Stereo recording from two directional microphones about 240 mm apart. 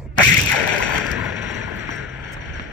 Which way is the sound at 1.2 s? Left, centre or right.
Centre.